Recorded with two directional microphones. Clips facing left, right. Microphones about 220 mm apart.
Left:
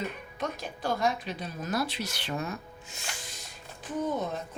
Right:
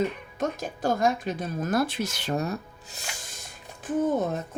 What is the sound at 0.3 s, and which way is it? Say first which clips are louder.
Speech: right 5 dB; 45° right (ahead or behind).